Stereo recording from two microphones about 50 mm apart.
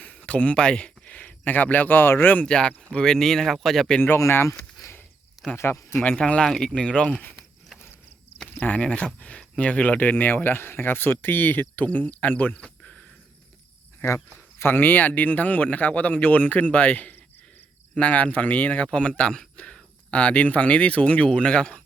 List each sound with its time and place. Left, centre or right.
0.0 s speech: left
2.4 s speech: centre
4.2 s speech: left
4.8 s a sound: left
5.5 s speech: left
5.9 s speech: left
6.1 s speech: left
8.5 s speech: left
8.9 s speech: left
12.5 s a sound: centre
14.6 s speech: left
18.9 s speech: left